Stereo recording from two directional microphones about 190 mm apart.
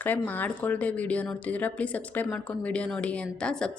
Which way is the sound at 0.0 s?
10° left (ahead or behind).